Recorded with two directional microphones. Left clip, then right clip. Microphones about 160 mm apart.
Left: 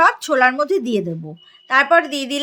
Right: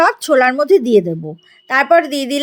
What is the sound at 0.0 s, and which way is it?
Speech, 35° right (ahead or behind).